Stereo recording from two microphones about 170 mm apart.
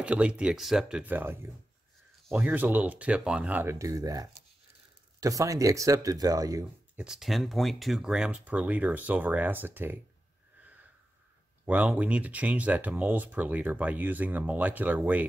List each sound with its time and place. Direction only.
0.0 s speech: 5° right (ahead or behind)
7.0 s speech: 5° right (ahead or behind)
11.6 s speech: 10° right (ahead or behind)